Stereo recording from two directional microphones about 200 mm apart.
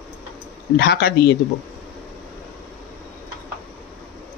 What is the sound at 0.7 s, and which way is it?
Speech, 55° left (ahead or behind).